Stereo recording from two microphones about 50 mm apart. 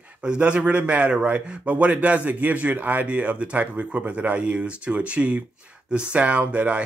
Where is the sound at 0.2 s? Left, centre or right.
Right.